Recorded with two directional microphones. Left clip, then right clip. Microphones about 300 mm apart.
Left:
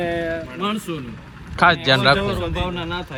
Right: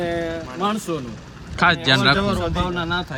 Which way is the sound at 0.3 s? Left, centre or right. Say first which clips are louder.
Right 1 dB; centre.